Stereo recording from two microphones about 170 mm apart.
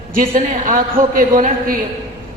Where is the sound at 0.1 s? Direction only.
50° right (ahead or behind).